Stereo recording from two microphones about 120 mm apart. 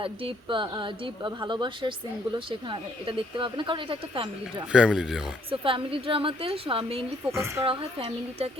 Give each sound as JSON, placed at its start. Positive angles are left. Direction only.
{"t": 0.0, "sound": "speech", "side_deg": -50}
{"t": 4.7, "sound": "speech", "side_deg": -5}
{"t": 5.5, "sound": "speech", "side_deg": -50}
{"t": 7.3, "sound": "a woman's voice", "side_deg": -20}
{"t": 7.6, "sound": "speech", "side_deg": -50}